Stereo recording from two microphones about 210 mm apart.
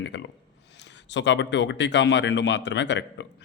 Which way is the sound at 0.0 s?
60° left (ahead or behind).